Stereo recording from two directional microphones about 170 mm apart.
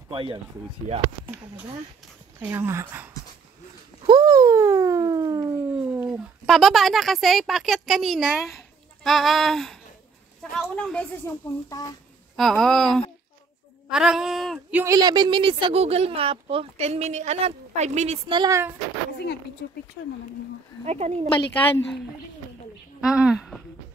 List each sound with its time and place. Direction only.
0.1 s speech: 30° right (ahead or behind)
2.4 s speech: 15° right (ahead or behind)
4.0 s a sound: 25° right (ahead or behind)
5.7 s a sound: 10° right (ahead or behind)
6.4 s a woman's voice: centre (ahead or behind)
12.4 s a woman's voice: centre (ahead or behind)
14.7 s speech: 10° right (ahead or behind)
15.0 s speech: 25° right (ahead or behind); by 18.2 s 40° right (ahead or behind)
18.3 s speech: 25° right (ahead or behind)
20.8 s speech: 40° right (ahead or behind)
21.5 s a woman's voice: 10° left (ahead or behind)
22.9 s a sound: 5° right (ahead or behind)